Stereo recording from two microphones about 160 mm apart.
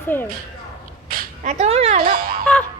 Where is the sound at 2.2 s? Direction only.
70° right (ahead or behind).